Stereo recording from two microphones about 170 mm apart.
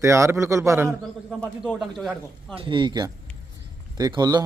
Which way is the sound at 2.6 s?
30° right (ahead or behind).